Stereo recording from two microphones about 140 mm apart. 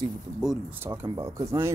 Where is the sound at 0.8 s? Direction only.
15° right (ahead or behind).